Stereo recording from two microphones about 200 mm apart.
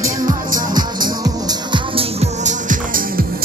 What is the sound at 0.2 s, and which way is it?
Music, 40° right (ahead or behind).